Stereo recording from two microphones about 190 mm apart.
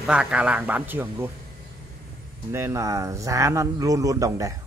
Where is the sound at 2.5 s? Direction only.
15° right (ahead or behind).